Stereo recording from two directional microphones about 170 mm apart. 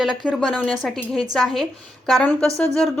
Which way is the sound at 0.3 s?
5° left (ahead or behind).